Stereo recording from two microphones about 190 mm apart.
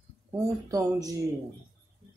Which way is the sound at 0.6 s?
20° right (ahead or behind).